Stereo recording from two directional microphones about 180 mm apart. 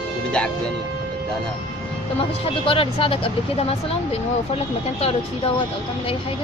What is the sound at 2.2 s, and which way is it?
Speech, 30° left (ahead or behind).